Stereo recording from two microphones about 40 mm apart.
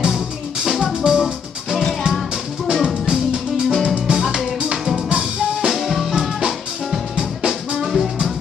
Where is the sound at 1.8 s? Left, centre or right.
Centre.